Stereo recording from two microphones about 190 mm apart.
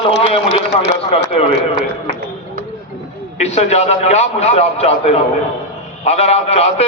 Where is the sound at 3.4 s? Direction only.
35° left (ahead or behind).